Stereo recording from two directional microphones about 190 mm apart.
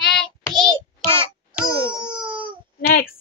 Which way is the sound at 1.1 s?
25° right (ahead or behind).